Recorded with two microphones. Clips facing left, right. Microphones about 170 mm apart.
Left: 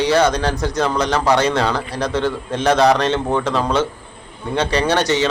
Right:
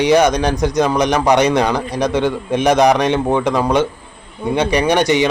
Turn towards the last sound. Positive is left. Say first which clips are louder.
# right 3 dB
turn(degrees=-15)  # may be behind; listen again after turning